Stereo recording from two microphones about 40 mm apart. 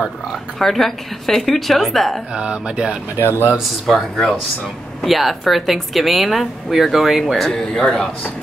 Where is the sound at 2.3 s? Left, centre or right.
Right.